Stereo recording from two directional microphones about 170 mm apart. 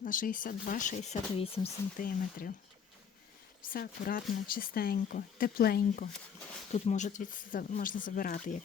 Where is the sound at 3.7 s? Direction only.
60° left (ahead or behind).